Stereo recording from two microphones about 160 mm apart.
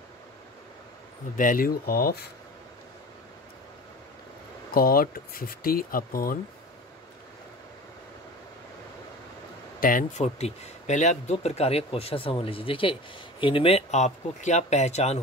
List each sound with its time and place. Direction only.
1.3 s speech: 55° left (ahead or behind)
4.7 s speech: 65° left (ahead or behind)
9.8 s speech: 60° left (ahead or behind)